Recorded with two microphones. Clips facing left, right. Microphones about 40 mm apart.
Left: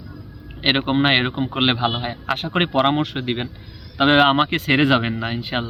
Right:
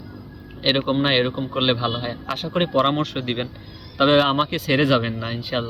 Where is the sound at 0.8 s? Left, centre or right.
Left.